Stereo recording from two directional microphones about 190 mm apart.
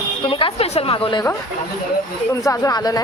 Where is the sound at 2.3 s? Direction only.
15° left (ahead or behind).